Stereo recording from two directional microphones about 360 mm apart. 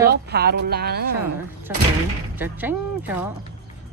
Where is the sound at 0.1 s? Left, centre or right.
Right.